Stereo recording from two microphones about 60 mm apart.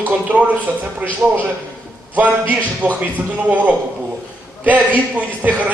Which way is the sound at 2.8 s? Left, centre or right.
Right.